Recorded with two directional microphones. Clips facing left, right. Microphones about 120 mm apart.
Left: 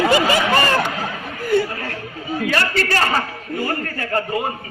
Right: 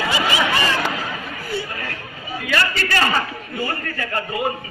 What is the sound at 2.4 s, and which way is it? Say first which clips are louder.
A man's voice: left 1 dB; 40° left (ahead or behind).